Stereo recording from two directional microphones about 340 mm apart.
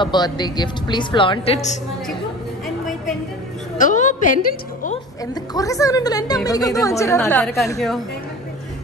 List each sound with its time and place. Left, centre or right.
0.0 s a woman's voice: centre
3.7 s a woman's voice: left
5.2 s a woman's voice: centre